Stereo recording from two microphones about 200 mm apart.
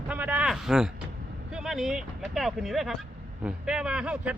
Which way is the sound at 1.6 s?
Centre (ahead or behind).